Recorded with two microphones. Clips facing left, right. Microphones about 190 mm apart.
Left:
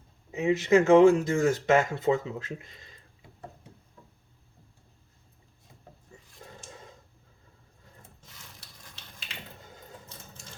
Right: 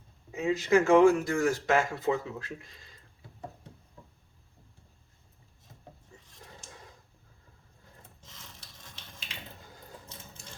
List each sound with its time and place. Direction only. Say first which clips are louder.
0.3 s speech: left 3 dB; 20° left (ahead or behind)